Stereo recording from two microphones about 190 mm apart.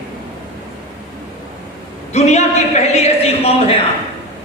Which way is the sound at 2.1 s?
35° left (ahead or behind).